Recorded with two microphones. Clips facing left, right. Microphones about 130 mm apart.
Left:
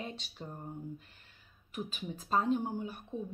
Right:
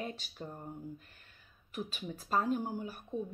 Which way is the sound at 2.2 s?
25° left (ahead or behind).